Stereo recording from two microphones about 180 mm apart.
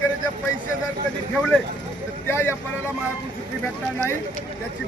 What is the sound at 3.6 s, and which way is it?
Speech, 15° left (ahead or behind).